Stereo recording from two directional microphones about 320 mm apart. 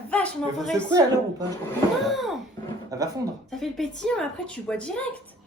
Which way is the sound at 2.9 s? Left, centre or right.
Centre.